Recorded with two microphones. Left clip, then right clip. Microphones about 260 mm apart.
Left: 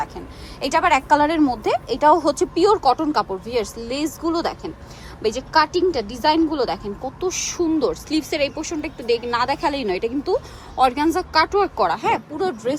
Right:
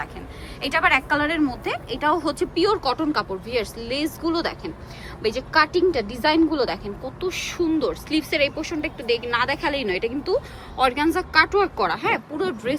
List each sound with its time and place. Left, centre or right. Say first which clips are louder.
0.6 s a woman's voice: left 2 dB; centre